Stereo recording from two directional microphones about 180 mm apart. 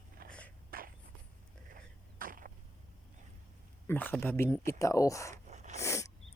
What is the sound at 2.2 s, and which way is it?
Chop, 50° right (ahead or behind).